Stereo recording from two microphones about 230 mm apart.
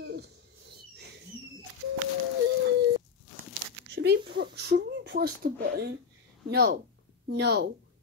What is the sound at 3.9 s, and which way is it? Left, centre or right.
A woman's voice, right.